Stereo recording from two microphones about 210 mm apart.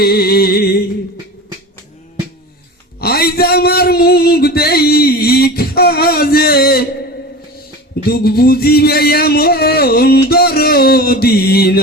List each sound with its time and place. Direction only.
0.0 s music: 50° left (ahead or behind)
3.0 s a sound: 50° left (ahead or behind)
8.0 s music: 50° left (ahead or behind)